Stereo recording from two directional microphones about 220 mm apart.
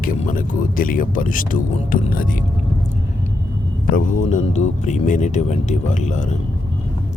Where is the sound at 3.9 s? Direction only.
35° left (ahead or behind).